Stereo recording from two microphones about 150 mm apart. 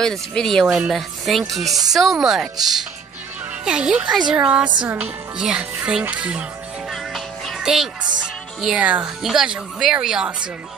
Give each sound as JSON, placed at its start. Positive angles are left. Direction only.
{"t": 0.0, "sound": "speech", "side_deg": 5}
{"t": 3.6, "sound": "speech", "side_deg": -5}
{"t": 6.9, "sound": "music", "side_deg": 0}
{"t": 8.5, "sound": "speech", "side_deg": -5}